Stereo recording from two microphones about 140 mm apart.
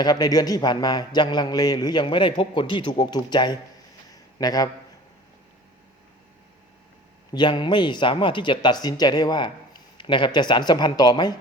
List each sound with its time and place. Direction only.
0.0 s a man's voice: 30° left (ahead or behind)
4.1 s a sound: 25° left (ahead or behind)
7.3 s a man's voice: 30° left (ahead or behind)